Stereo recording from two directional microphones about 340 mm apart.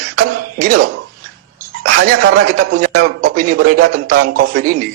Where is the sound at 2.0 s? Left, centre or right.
Right.